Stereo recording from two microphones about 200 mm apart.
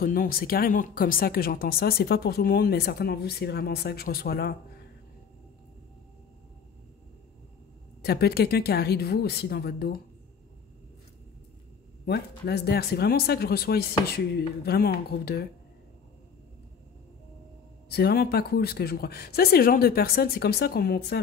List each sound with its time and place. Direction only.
0.0 s speech: 45° left (ahead or behind)
8.0 s speech: 50° left (ahead or behind)
12.1 s speech: 55° left (ahead or behind)
17.8 s speech: 50° left (ahead or behind)